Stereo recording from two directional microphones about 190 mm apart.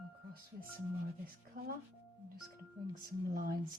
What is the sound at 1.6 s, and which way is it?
Speech, 50° right (ahead or behind).